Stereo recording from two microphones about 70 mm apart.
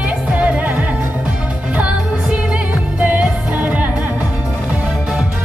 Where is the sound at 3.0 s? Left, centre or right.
Centre.